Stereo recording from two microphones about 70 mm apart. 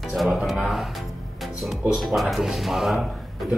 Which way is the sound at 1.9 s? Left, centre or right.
Centre.